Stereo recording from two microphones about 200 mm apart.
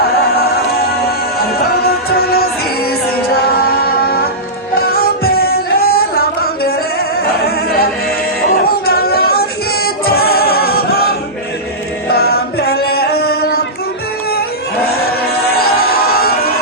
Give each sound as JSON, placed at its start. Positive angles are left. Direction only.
{"t": 1.4, "sound": "music", "side_deg": 50}
{"t": 12.0, "sound": "chant", "side_deg": 50}
{"t": 15.5, "sound": "music", "side_deg": 50}